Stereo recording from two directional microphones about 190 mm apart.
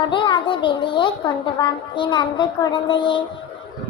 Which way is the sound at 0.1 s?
25° left (ahead or behind).